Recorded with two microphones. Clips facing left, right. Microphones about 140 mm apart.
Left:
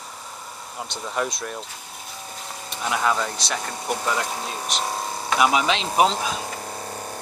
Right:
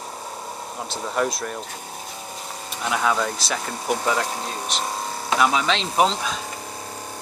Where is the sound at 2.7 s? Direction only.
Centre (ahead or behind).